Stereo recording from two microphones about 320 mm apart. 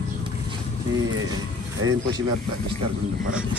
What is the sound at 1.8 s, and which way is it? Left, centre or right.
Speech, right.